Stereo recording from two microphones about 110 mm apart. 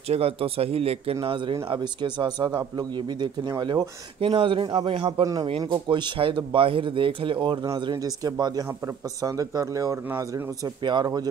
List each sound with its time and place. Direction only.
0.1 s speech: 65° right (ahead or behind)
1.2 s a man's voice: 50° right (ahead or behind)
4.2 s a man's voice: 50° right (ahead or behind)
4.9 s speech: 65° right (ahead or behind)
5.2 s a man's voice: 35° right (ahead or behind)
7.6 s a man's voice: 35° right (ahead or behind)
10.8 s a man's voice: 45° right (ahead or behind)